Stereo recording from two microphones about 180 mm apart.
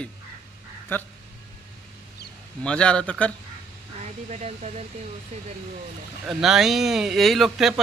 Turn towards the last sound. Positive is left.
turn(degrees=0)  # may be behind; listen again after turning